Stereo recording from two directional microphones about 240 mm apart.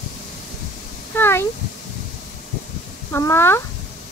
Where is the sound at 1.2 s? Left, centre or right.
Centre.